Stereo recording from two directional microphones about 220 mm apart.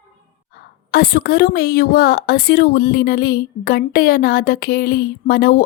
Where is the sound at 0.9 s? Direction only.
45° left (ahead or behind).